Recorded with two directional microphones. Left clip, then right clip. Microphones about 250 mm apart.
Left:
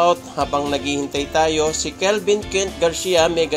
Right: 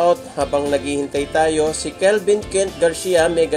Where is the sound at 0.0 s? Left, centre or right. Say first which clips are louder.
Even; centre.